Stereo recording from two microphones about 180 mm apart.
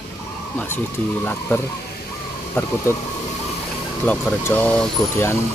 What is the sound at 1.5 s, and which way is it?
Speech, 10° left (ahead or behind).